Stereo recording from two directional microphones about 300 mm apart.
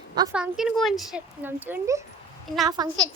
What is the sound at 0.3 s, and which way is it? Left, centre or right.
A child's voice, centre.